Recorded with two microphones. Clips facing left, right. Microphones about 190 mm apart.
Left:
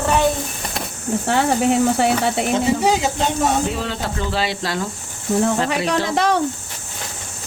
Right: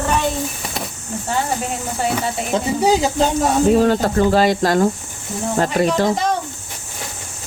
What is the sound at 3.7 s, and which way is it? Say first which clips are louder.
Speech: right 10 dB; 45° right (ahead or behind).